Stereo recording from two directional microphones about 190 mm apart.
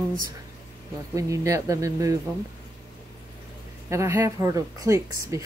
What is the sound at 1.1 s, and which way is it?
Speech, 15° right (ahead or behind).